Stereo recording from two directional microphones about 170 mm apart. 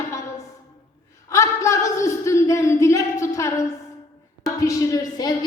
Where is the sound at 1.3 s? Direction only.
15° left (ahead or behind).